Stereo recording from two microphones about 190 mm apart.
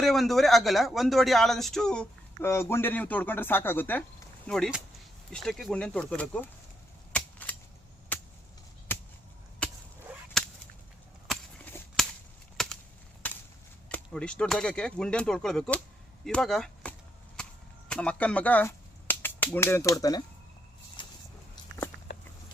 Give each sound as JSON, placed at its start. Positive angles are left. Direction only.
{"t": 0.0, "sound": "speech", "side_deg": 0}
{"t": 7.1, "sound": "cap gun", "side_deg": 10}
{"t": 8.1, "sound": "chop", "side_deg": 10}
{"t": 8.9, "sound": "whip", "side_deg": 10}
{"t": 11.3, "sound": "a sound", "side_deg": 5}
{"t": 12.6, "sound": "chop", "side_deg": 0}
{"t": 13.9, "sound": "speech", "side_deg": 5}
{"t": 17.4, "sound": "chop", "side_deg": 5}
{"t": 17.8, "sound": "speech", "side_deg": 5}
{"t": 21.0, "sound": "a sound", "side_deg": 25}